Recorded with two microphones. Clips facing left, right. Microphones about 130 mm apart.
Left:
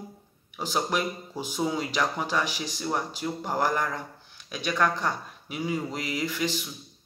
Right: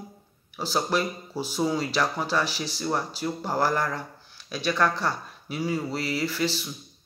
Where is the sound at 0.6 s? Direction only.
15° left (ahead or behind).